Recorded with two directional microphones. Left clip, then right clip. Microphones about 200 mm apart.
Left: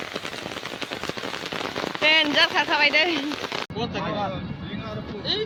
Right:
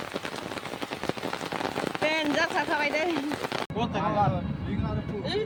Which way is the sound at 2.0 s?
Centre (ahead or behind).